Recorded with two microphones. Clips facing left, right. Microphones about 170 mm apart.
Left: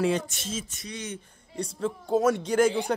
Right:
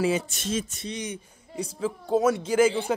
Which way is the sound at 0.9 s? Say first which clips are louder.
Right 2 dB; 15° right (ahead or behind).